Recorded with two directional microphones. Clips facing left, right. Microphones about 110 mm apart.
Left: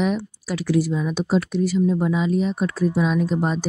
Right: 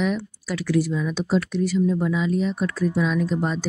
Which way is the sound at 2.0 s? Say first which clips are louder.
Left 2 dB; 25° left (ahead or behind).